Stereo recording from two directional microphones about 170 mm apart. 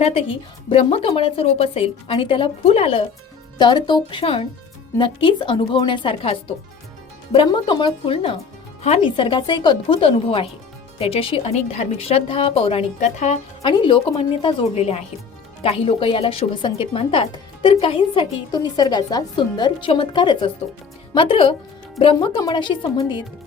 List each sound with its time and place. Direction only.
0.0 s a woman's voice: 35° left (ahead or behind)
7.3 s a woman's voice: 25° left (ahead or behind)
13.7 s a woman's voice: 30° left (ahead or behind)